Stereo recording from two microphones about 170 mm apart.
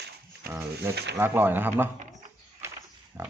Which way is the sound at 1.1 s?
15° right (ahead or behind).